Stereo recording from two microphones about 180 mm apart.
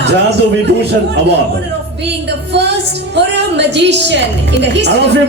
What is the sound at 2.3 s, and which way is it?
A woman's voice, 70° right (ahead or behind).